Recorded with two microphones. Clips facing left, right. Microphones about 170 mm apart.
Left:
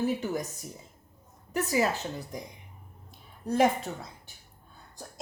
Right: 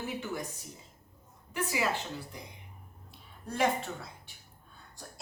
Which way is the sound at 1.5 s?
40° left (ahead or behind).